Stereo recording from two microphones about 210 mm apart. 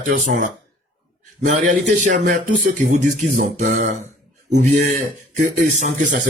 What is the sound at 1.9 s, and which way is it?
A man's voice, 35° right (ahead or behind).